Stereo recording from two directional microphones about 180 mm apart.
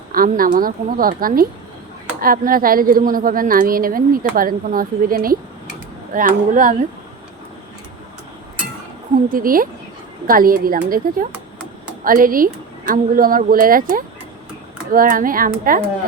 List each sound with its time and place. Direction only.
0.1 s a woman's voice: 50° right (ahead or behind)
9.3 s a woman's voice: 50° right (ahead or behind)